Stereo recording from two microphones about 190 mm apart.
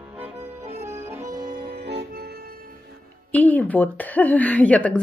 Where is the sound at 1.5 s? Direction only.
50° right (ahead or behind).